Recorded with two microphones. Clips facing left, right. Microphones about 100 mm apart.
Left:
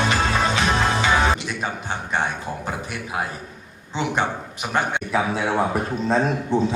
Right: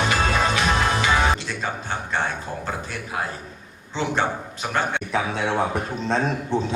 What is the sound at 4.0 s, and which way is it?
A man's voice, 15° left (ahead or behind).